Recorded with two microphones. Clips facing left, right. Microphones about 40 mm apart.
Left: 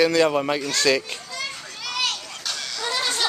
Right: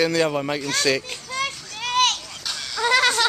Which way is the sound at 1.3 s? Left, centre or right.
Right.